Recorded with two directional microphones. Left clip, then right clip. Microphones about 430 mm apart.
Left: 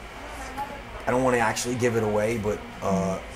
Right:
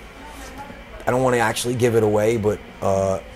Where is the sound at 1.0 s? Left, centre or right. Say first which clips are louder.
Right 4 dB; right.